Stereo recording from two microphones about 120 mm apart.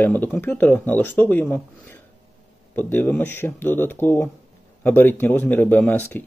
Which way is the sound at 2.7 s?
15° left (ahead or behind).